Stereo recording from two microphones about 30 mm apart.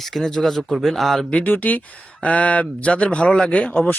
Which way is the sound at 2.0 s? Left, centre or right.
Left.